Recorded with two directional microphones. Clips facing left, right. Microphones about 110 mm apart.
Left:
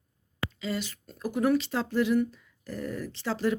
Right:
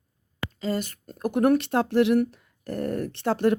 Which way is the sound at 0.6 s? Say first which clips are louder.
Right 6 dB; 45° right (ahead or behind).